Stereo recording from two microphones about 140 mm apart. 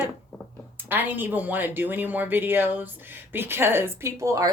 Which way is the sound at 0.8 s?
15° right (ahead or behind).